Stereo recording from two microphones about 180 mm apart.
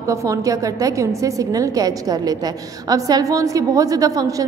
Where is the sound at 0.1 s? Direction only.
20° right (ahead or behind).